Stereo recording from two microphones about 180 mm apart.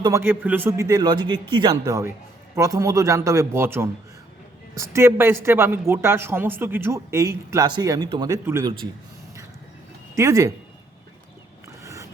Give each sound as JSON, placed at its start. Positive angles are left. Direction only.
{"t": 0.0, "sound": "a man's voice", "side_deg": -15}
{"t": 10.2, "sound": "a man's voice", "side_deg": -15}
{"t": 11.8, "sound": "a sound", "side_deg": -15}